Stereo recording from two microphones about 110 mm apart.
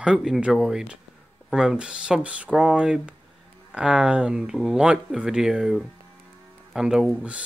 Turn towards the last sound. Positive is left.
turn(degrees=-5)  # may be behind; listen again after turning